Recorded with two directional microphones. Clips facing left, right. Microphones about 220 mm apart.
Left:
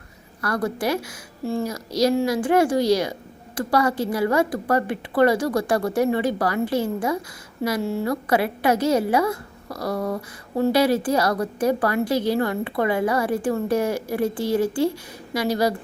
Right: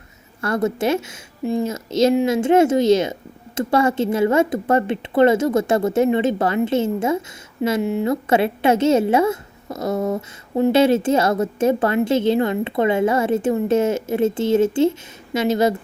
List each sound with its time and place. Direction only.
0.4 s a woman's voice: 25° right (ahead or behind)